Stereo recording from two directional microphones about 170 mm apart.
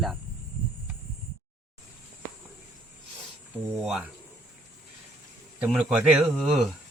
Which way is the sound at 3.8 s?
Centre (ahead or behind).